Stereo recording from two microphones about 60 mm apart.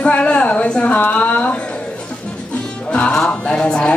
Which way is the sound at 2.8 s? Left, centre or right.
Centre.